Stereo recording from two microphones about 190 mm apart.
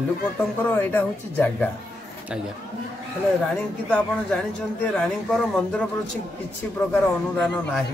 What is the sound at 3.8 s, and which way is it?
A man's voice, 5° left (ahead or behind).